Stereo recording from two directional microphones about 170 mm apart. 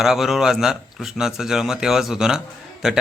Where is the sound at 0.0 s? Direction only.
Centre (ahead or behind).